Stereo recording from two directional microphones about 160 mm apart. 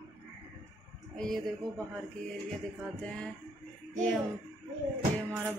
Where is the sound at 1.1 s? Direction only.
Centre (ahead or behind).